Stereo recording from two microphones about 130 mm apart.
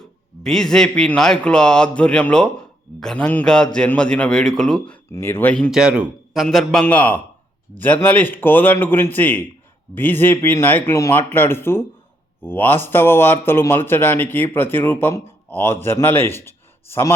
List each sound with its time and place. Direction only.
0.0 s speech: 5° left (ahead or behind)
5.1 s speech: 15° left (ahead or behind)
5.7 s a man's voice: 5° right (ahead or behind); by 17.2 s 20° left (ahead or behind)